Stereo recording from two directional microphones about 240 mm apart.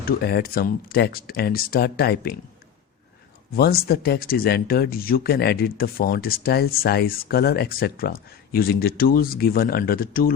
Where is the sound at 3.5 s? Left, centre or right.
Left.